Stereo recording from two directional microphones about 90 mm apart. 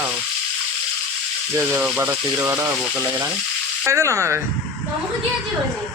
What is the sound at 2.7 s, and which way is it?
Speech, 15° right (ahead or behind).